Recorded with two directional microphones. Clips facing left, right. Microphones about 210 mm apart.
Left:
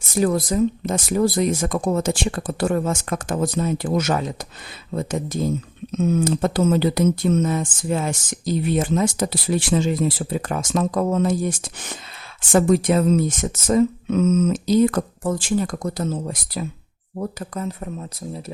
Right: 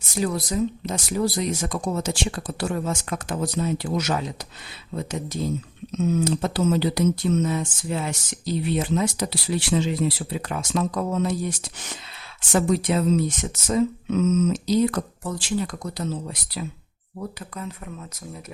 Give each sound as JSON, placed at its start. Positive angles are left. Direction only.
{"t": 0.2, "sound": "speech", "side_deg": 50}